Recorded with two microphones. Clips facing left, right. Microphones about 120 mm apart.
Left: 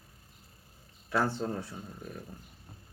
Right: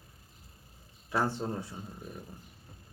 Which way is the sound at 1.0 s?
15° right (ahead or behind).